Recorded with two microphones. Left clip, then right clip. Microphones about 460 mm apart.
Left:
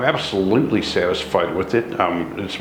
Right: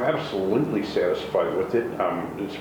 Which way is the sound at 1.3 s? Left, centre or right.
Left.